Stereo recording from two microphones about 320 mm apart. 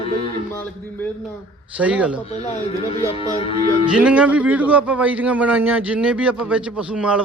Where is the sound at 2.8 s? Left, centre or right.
Centre.